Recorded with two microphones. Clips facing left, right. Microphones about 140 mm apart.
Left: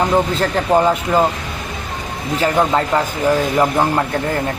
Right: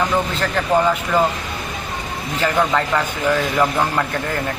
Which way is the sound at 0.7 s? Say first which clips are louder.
Left 2 dB; 25° left (ahead or behind).